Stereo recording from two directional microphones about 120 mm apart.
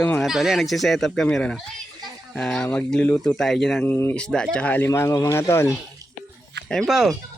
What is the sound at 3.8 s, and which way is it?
Speech, 15° left (ahead or behind).